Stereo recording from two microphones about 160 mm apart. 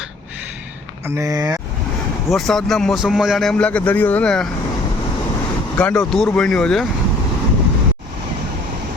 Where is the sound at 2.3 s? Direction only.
Centre (ahead or behind).